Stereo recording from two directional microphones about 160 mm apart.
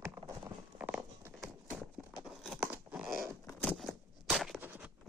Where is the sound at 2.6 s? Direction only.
10° right (ahead or behind).